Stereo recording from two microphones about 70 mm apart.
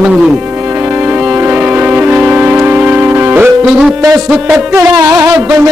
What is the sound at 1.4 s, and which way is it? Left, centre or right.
Music, right.